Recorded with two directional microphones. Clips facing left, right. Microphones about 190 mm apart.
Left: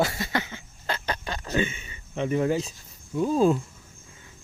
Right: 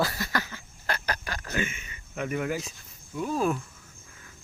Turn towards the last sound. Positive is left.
turn(degrees=25)  # may be behind; listen again after turning